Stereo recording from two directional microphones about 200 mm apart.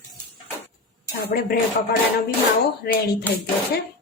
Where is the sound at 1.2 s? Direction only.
50° left (ahead or behind).